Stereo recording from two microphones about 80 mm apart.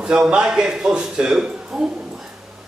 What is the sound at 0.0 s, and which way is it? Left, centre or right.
A man's voice, centre.